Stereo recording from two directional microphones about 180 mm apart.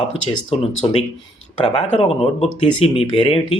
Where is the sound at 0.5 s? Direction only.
30° left (ahead or behind).